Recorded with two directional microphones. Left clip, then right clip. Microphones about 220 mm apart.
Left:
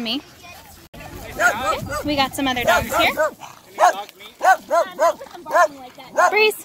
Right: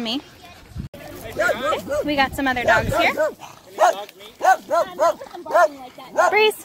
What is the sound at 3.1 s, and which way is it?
Dog, 35° left (ahead or behind).